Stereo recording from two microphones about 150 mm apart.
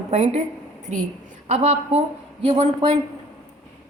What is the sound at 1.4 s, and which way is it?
A woman's voice, 45° right (ahead or behind).